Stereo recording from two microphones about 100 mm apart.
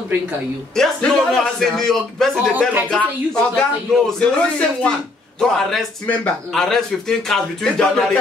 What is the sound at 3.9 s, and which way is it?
A man's voice, 5° left (ahead or behind).